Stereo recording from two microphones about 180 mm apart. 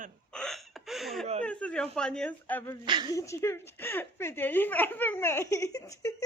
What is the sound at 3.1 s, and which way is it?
A woman's voice, 15° left (ahead or behind).